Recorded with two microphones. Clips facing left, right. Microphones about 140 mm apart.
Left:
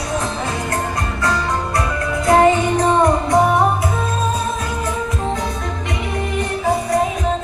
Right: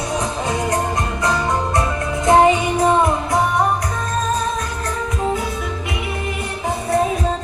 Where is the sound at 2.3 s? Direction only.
20° right (ahead or behind).